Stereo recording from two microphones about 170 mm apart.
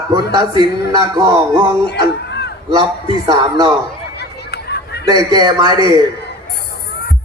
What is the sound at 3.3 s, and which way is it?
Speech, 25° right (ahead or behind).